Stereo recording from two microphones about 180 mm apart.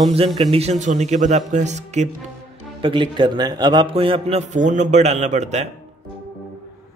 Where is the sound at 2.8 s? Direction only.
30° right (ahead or behind).